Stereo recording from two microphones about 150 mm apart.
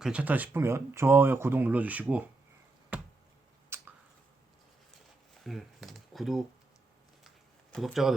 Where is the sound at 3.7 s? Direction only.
15° right (ahead or behind).